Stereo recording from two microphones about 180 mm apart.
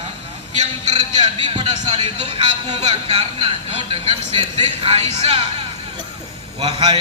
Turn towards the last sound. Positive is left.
turn(degrees=-35)  # may be behind; listen again after turning